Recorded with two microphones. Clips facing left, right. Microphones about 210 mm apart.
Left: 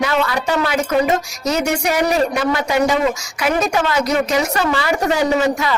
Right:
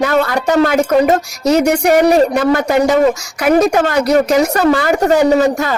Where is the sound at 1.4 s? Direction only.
60° right (ahead or behind).